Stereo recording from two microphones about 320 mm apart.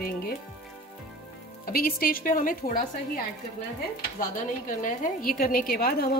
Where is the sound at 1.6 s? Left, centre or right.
Left.